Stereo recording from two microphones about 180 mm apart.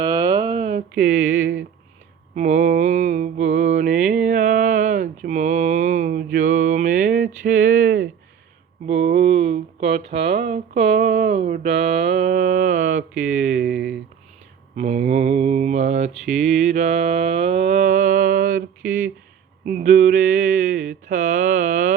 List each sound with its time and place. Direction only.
0.0 s a sound: 25° right (ahead or behind); by 1.6 s 50° right (ahead or behind)
2.3 s mantra: 40° right (ahead or behind)
7.4 s a sound: 50° right (ahead or behind)
8.9 s speech: 40° right (ahead or behind)
14.8 s mantra: 40° right (ahead or behind)
19.6 s mantra: 45° right (ahead or behind)